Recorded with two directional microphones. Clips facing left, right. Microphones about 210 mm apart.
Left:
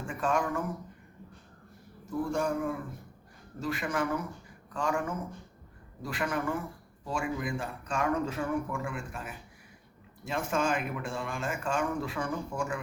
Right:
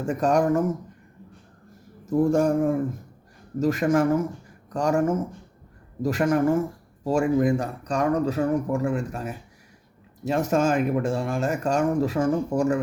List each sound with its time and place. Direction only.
0.0 s speech: 40° right (ahead or behind)
2.0 s speech: 45° right (ahead or behind)